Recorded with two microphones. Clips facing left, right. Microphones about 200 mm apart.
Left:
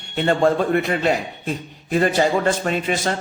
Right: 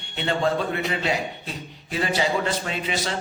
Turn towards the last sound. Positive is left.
turn(degrees=50)  # may be behind; listen again after turning